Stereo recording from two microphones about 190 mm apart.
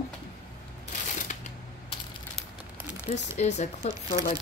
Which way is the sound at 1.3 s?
40° left (ahead or behind).